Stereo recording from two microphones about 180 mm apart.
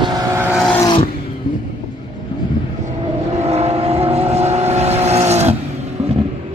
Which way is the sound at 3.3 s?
35° right (ahead or behind).